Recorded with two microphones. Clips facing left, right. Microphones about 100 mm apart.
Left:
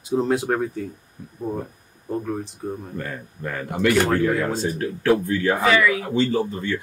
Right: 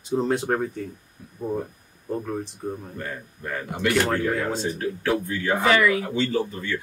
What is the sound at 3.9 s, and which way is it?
Speech, centre (ahead or behind).